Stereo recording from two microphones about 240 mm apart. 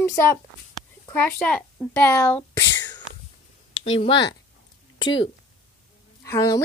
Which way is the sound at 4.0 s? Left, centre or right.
Left.